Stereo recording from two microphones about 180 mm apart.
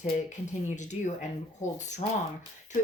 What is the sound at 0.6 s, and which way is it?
Speech, 40° left (ahead or behind).